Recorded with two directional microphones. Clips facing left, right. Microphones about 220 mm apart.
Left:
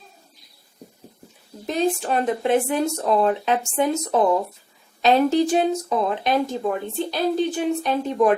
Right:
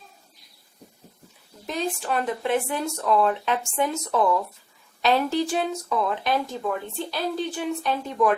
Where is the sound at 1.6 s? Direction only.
25° left (ahead or behind).